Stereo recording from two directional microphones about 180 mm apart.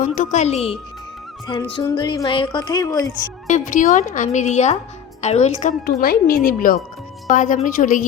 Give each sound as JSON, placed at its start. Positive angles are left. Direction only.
{"t": 0.0, "sound": "a woman's voice", "side_deg": 40}
{"t": 3.4, "sound": "a woman's voice", "side_deg": 45}